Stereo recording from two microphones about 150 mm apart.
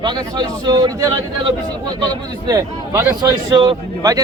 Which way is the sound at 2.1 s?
25° right (ahead or behind).